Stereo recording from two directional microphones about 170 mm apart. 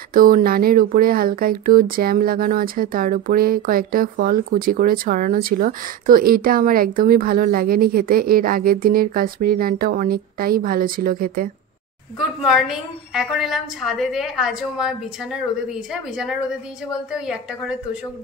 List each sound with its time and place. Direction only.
0.1 s speech: 55° right (ahead or behind)
12.4 s a woman's voice: centre (ahead or behind)